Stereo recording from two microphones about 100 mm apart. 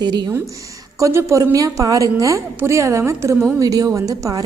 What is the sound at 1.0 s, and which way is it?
A woman's voice, 30° right (ahead or behind).